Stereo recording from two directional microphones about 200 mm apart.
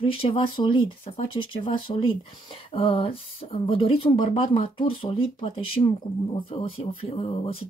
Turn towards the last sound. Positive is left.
turn(degrees=30)  # may be behind; listen again after turning